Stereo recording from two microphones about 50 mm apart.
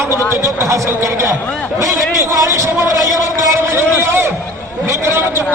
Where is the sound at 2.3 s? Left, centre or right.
Right.